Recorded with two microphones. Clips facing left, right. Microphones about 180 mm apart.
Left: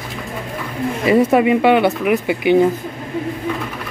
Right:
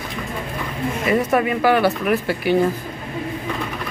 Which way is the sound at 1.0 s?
25° left (ahead or behind).